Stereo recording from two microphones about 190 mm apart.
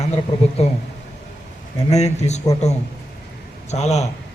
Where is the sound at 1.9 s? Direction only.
35° left (ahead or behind).